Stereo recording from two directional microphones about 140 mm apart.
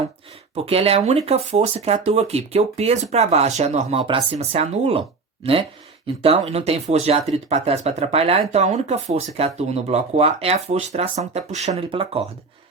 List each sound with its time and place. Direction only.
0.5 s speech: 45° right (ahead or behind)